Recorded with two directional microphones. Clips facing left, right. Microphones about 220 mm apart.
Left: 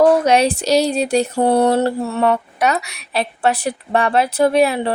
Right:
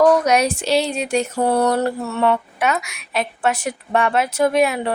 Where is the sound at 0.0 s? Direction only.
30° left (ahead or behind).